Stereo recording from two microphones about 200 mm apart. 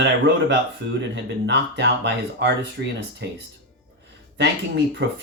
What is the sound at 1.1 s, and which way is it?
Speech, 60° right (ahead or behind).